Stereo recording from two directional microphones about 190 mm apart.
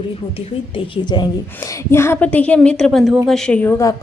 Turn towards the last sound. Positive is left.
turn(degrees=10)  # may be behind; listen again after turning